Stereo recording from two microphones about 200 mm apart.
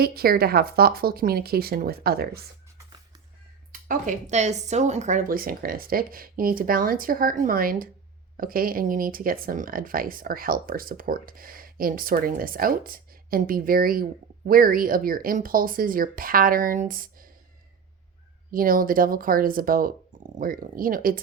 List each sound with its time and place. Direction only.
0.0 s speech: 50° right (ahead or behind)
3.8 s speech: 40° right (ahead or behind)
18.5 s speech: 45° right (ahead or behind)